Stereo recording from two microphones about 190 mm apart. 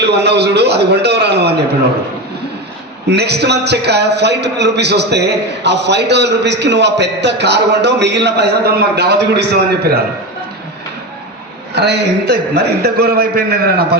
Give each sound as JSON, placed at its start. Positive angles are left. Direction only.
{"t": 0.0, "sound": "a man's voice", "side_deg": -65}
{"t": 3.1, "sound": "a man's voice", "side_deg": -60}
{"t": 11.7, "sound": "a man's voice", "side_deg": -60}